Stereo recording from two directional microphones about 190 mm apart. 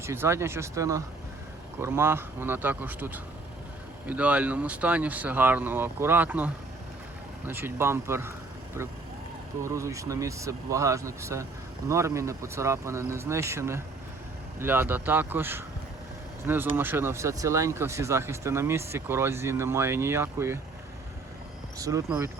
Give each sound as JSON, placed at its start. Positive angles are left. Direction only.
{"t": 0.0, "sound": "speech", "side_deg": -15}
{"t": 9.6, "sound": "speech", "side_deg": -15}
{"t": 16.7, "sound": "speech", "side_deg": -10}
{"t": 21.8, "sound": "speech", "side_deg": -15}